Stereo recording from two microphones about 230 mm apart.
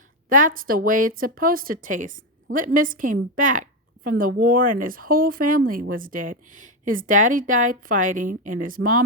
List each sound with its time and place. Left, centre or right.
0.3 s speech: right